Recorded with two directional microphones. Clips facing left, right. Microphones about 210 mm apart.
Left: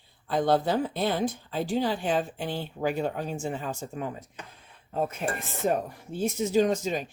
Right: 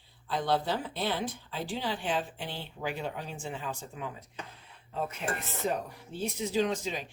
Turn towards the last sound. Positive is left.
turn(degrees=45)  # may be behind; listen again after turning